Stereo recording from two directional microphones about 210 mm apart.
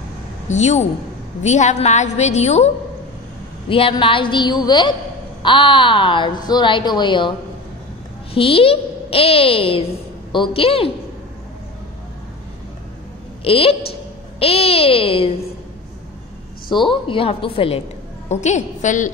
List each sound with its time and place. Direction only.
0.5 s a woman's voice: 35° left (ahead or behind)
8.4 s speech: 25° left (ahead or behind)
13.4 s a woman's voice: 25° left (ahead or behind)
16.6 s a woman's voice: 25° left (ahead or behind)